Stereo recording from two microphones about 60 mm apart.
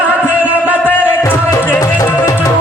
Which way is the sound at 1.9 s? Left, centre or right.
Left.